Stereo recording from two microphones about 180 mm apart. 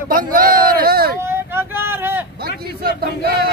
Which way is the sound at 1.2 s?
15° right (ahead or behind).